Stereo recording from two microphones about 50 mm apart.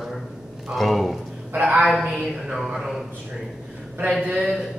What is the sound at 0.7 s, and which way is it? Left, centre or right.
Speech, centre.